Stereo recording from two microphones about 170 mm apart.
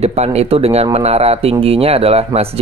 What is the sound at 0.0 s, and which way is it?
Speech, 40° right (ahead or behind).